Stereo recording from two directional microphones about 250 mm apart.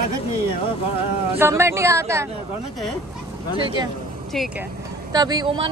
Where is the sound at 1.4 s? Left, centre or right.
Centre.